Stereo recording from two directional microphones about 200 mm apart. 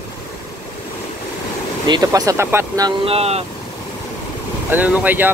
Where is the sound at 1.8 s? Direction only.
20° right (ahead or behind).